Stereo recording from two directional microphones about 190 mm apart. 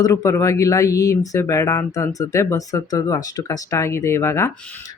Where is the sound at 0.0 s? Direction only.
20° left (ahead or behind).